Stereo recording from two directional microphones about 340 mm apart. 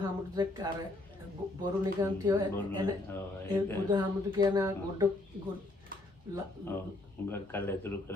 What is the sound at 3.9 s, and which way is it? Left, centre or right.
Speech, centre.